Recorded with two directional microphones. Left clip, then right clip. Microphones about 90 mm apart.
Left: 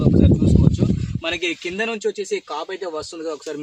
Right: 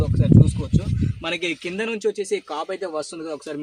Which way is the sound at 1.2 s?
10° right (ahead or behind).